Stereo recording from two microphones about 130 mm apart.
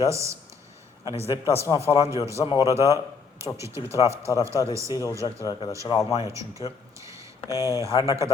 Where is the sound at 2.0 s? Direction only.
25° right (ahead or behind).